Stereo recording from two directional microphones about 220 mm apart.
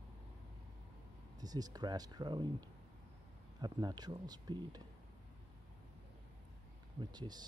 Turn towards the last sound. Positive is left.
turn(degrees=-20)  # may be behind; listen again after turning